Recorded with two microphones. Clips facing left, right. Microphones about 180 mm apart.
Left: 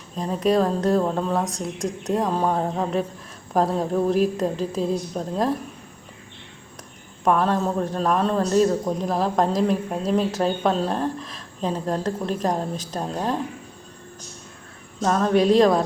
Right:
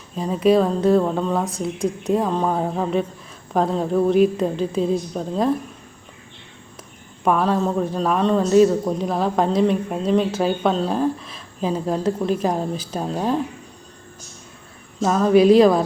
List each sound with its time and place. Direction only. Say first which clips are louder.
0.2 s speech: right 4 dB; centre (ahead or behind)
7.3 s speech: right 1 dB; centre (ahead or behind)
15.0 s speech: right 4 dB; 5° right (ahead or behind)